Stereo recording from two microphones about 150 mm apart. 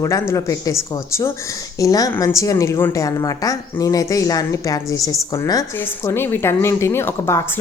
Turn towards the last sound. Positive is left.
turn(degrees=15)  # may be behind; listen again after turning